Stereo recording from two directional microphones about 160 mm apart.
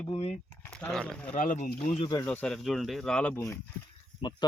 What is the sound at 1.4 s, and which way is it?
Speech, 55° left (ahead or behind).